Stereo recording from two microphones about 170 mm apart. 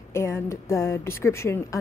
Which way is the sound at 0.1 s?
15° left (ahead or behind).